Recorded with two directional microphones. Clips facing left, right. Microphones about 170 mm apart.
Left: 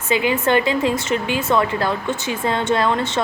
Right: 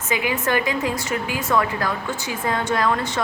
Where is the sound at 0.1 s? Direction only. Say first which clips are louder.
Left 5 dB; 30° left (ahead or behind).